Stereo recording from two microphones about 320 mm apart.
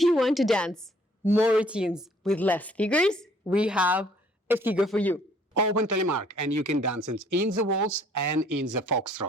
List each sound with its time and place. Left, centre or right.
0.0 s a woman's voice: centre
5.5 s a man's voice: right